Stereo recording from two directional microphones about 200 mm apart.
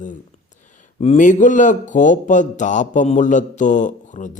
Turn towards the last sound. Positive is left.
turn(degrees=40)  # may be behind; listen again after turning